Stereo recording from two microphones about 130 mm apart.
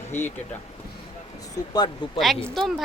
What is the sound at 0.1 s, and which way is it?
Speech, 15° left (ahead or behind).